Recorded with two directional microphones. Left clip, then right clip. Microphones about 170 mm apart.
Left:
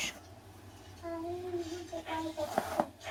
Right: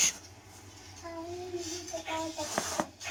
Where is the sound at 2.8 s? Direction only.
Centre (ahead or behind).